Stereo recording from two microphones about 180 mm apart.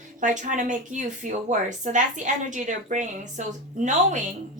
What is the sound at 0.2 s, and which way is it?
A woman's voice, 45° right (ahead or behind).